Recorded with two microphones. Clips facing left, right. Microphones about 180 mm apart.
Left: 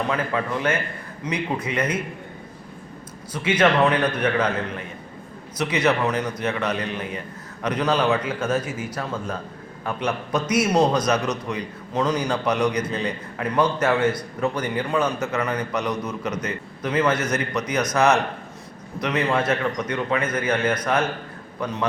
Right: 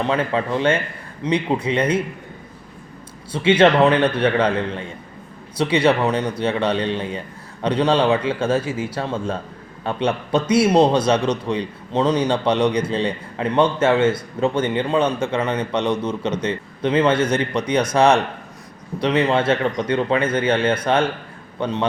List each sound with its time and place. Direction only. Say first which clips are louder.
0.0 s a man's voice: right 4 dB; 30° right (ahead or behind)
3.3 s a man's voice: right 5 dB; 30° right (ahead or behind)